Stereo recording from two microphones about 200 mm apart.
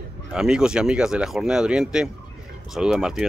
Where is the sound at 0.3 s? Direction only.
5° right (ahead or behind).